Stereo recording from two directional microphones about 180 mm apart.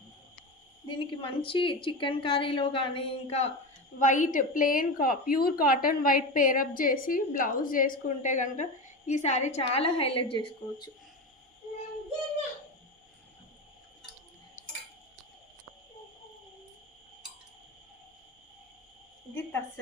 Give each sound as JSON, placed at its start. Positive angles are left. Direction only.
{"t": 0.9, "sound": "a woman's voice", "side_deg": 30}